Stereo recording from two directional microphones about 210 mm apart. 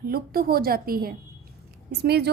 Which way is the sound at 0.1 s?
45° right (ahead or behind).